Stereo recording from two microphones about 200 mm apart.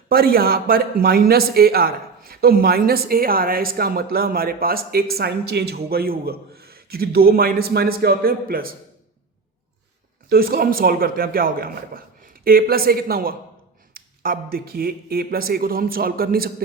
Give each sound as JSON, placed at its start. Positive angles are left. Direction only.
{"t": 0.1, "sound": "speech", "side_deg": -50}
{"t": 10.2, "sound": "speech", "side_deg": -50}